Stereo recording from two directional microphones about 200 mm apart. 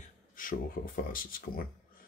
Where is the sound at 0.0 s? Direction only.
40° left (ahead or behind).